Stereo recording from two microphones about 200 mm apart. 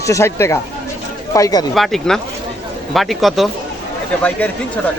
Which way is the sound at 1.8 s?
Centre (ahead or behind).